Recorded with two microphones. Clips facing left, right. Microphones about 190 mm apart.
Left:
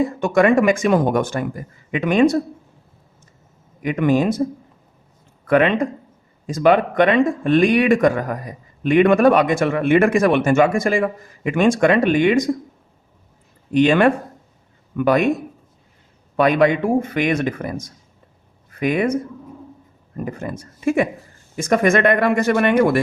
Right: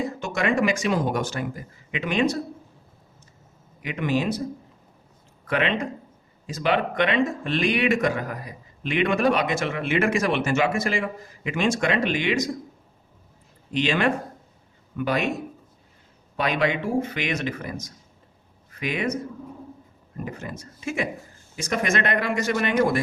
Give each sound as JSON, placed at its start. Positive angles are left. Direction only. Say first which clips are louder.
{"t": 0.0, "sound": "speech", "louder": "left 10 dB", "side_deg": 55}
{"t": 3.8, "sound": "speech", "louder": "left 8 dB", "side_deg": 50}
{"t": 5.5, "sound": "speech", "louder": "left 9 dB", "side_deg": 50}
{"t": 13.7, "sound": "speech", "louder": "left 8 dB", "side_deg": 50}
{"t": 16.4, "sound": "speech", "louder": "left 9 dB", "side_deg": 50}
{"t": 20.2, "sound": "speech", "louder": "left 7 dB", "side_deg": 55}